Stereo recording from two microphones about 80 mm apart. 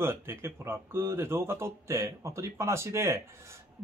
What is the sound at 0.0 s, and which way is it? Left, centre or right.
Speech, right.